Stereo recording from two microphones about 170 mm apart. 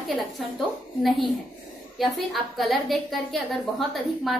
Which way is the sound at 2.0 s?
Centre (ahead or behind).